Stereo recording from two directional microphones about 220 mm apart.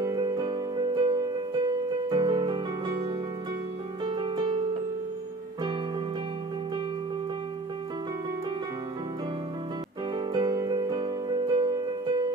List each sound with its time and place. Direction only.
0.0 s music: 20° right (ahead or behind)
10.1 s music: 20° right (ahead or behind)